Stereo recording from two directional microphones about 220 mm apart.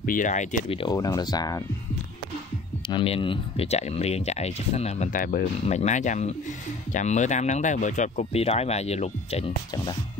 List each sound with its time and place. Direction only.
0.0 s speech: 35° left (ahead or behind); by 1.6 s 15° left (ahead or behind)
2.9 s speech: 25° left (ahead or behind)